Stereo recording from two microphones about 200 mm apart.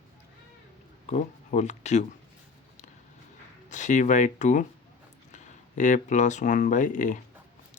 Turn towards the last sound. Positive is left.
turn(degrees=40)  # may be behind; listen again after turning